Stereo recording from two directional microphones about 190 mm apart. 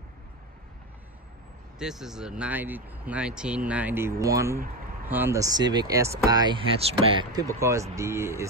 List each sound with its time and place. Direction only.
1.8 s speech: centre (ahead or behind); by 7.4 s 25° right (ahead or behind)
7.9 s speech: 15° right (ahead or behind)